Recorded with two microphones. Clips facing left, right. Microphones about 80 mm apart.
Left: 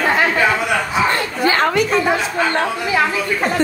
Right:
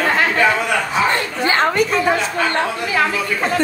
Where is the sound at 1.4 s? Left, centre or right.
Right.